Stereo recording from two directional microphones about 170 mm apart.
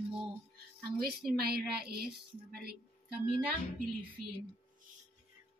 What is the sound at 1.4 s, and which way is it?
A woman's voice, 65° right (ahead or behind).